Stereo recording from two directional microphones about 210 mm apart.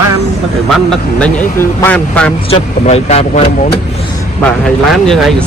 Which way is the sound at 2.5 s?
30° left (ahead or behind).